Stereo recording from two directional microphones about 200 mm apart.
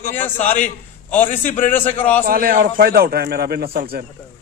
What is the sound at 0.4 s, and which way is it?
Speech, 35° left (ahead or behind).